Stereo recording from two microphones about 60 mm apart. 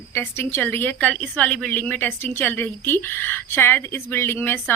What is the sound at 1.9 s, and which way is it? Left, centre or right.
A woman's voice, left.